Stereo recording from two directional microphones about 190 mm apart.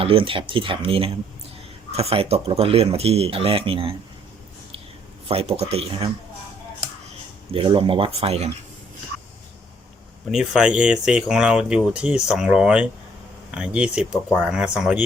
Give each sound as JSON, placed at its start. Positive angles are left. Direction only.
{"t": 0.0, "sound": "speech", "side_deg": -30}
{"t": 5.3, "sound": "speech", "side_deg": -30}
{"t": 7.5, "sound": "speech", "side_deg": -30}
{"t": 10.3, "sound": "speech", "side_deg": -5}